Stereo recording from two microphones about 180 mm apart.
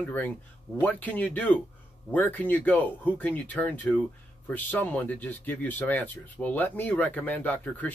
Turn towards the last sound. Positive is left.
turn(degrees=10)  # may be behind; listen again after turning